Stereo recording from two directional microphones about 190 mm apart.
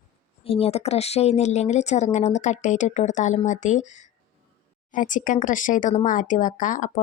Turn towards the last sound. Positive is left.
turn(degrees=40)  # may be behind; listen again after turning